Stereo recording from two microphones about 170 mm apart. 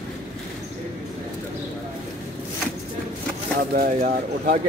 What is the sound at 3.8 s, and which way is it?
Speech, 55° right (ahead or behind).